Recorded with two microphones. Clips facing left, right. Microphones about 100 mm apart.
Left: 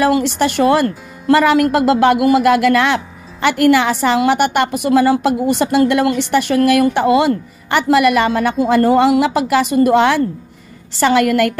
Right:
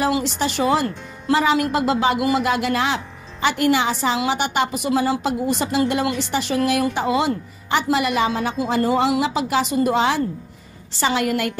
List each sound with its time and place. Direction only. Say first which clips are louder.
0.1 s speech: left 7 dB; 65° left (ahead or behind)